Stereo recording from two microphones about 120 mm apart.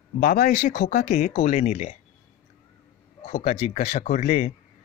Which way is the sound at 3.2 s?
75° left (ahead or behind).